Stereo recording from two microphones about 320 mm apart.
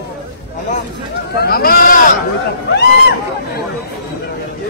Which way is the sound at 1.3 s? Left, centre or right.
Left.